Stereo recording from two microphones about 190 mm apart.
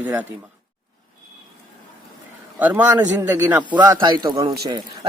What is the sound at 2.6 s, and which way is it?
Speech, 10° right (ahead or behind).